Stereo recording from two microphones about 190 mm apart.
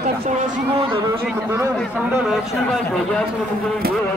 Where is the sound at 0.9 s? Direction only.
15° right (ahead or behind).